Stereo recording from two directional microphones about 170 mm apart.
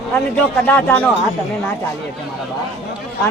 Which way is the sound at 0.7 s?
10° left (ahead or behind).